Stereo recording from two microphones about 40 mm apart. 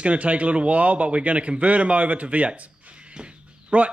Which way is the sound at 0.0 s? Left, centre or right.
Right.